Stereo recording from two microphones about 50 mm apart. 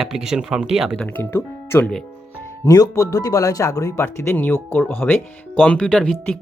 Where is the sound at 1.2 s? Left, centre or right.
Left.